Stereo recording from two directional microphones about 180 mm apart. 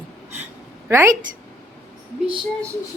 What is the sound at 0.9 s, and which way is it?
Speech, 15° right (ahead or behind).